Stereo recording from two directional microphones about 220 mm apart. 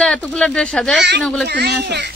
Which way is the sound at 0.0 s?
5° left (ahead or behind).